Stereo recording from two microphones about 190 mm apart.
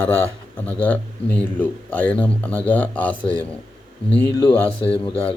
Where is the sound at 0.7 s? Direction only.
10° left (ahead or behind).